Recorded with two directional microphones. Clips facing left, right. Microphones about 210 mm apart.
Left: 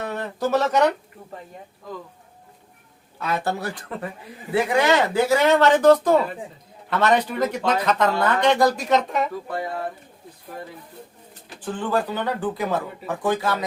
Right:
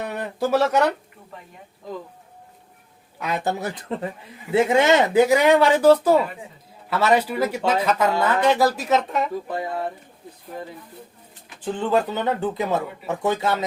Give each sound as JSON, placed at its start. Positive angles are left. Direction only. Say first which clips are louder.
{"t": 0.0, "sound": "speech", "louder": "even", "side_deg": -15}
{"t": 3.2, "sound": "speech", "louder": "even", "side_deg": -15}
{"t": 11.6, "sound": "speech", "louder": "right 3 dB", "side_deg": -20}